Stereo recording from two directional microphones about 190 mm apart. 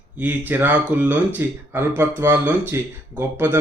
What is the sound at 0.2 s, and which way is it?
Speech, 10° right (ahead or behind).